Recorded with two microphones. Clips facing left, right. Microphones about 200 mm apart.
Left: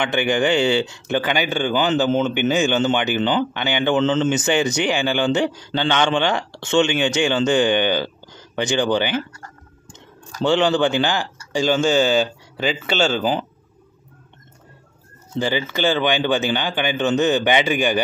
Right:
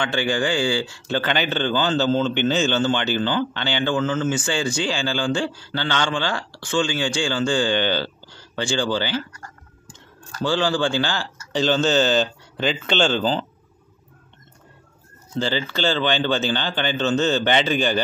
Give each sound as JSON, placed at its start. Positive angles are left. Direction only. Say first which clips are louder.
{"t": 0.0, "sound": "speech", "louder": "left 3 dB", "side_deg": 20}
{"t": 15.3, "sound": "speech", "louder": "left 2 dB", "side_deg": 15}